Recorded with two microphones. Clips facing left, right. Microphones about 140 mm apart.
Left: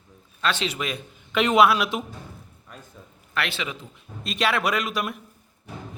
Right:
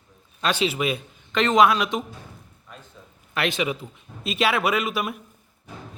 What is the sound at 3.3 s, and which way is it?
Speech, 15° right (ahead or behind).